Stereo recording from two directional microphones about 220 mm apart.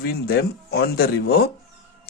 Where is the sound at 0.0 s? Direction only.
45° left (ahead or behind).